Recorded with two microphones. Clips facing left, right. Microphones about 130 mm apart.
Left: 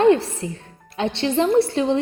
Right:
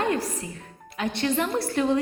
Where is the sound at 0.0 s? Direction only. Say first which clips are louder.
Left 10 dB; 25° left (ahead or behind).